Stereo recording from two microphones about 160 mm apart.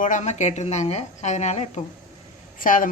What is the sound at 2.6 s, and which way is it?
Speech, 55° left (ahead or behind).